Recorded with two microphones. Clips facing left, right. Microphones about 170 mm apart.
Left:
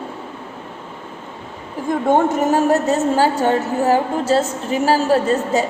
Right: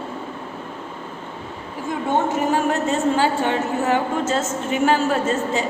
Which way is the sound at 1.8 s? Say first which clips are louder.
Left 6 dB; 45° left (ahead or behind).